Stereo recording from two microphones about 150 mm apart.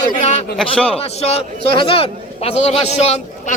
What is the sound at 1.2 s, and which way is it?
A man's voice, 40° left (ahead or behind).